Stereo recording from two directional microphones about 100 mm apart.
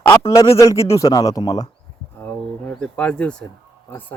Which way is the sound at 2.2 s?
20° left (ahead or behind).